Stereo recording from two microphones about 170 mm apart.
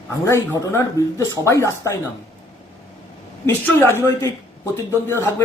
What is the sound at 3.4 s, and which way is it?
A man's voice, 15° left (ahead or behind).